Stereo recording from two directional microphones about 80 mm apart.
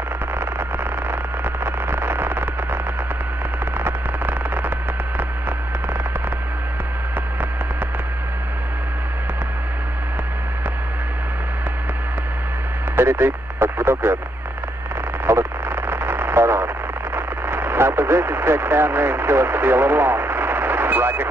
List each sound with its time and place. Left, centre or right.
1.1 s a sound: right
12.9 s radio: right
15.2 s radio: right